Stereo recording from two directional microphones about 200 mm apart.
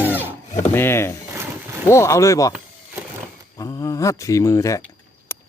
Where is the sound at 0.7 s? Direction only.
10° left (ahead or behind).